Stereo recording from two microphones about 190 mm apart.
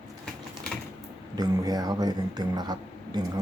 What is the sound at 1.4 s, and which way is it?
Speech, 20° right (ahead or behind).